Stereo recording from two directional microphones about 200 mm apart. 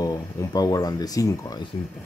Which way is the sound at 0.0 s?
20° left (ahead or behind).